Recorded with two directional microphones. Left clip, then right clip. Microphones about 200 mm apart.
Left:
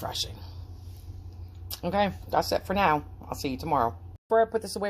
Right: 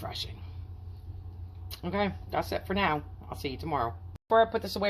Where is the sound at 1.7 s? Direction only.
35° left (ahead or behind).